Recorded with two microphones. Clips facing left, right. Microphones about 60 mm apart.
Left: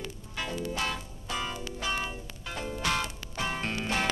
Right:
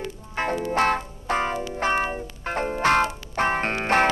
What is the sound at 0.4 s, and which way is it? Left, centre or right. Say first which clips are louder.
Music: right 10 dB; right.